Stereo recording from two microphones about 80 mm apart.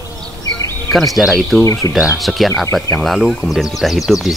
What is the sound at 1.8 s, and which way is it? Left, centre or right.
Speech, left.